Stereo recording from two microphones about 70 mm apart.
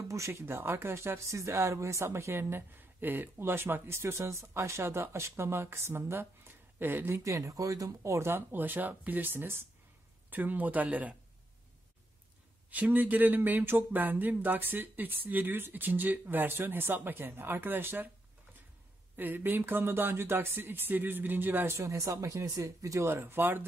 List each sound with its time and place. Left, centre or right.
0.1 s speech: right
7.2 s speech: right
12.7 s speech: right
19.1 s speech: right
21.8 s speech: right
23.0 s speech: right